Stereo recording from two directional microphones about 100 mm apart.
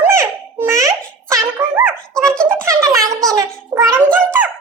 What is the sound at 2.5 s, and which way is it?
Music, 25° right (ahead or behind).